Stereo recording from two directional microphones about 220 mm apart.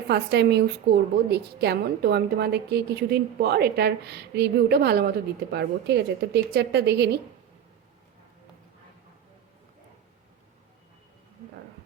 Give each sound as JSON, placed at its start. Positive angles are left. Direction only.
{"t": 0.1, "sound": "a woman's voice", "side_deg": -50}